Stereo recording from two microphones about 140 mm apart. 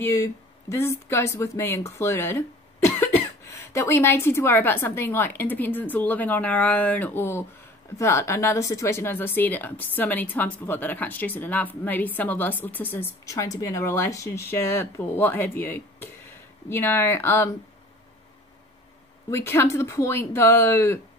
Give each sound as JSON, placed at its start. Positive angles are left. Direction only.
{"t": 0.0, "sound": "speech", "side_deg": 20}
{"t": 19.3, "sound": "speech", "side_deg": 15}